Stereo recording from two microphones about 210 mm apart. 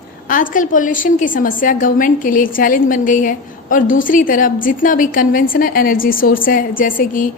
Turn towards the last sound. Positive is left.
turn(degrees=40)  # may be behind; listen again after turning